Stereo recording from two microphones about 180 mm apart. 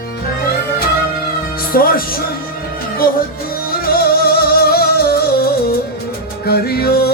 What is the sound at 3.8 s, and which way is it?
Music, 60° left (ahead or behind).